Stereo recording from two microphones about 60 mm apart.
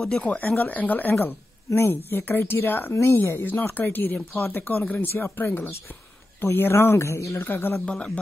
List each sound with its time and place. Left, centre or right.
0.2 s a woman's voice: left
7.3 s a woman's voice: left
7.8 s speech: centre